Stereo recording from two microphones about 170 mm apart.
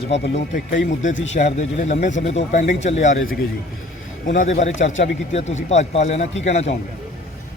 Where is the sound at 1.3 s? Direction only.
40° left (ahead or behind).